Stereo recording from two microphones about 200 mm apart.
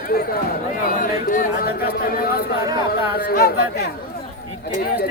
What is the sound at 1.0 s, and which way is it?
Speech, 40° left (ahead or behind).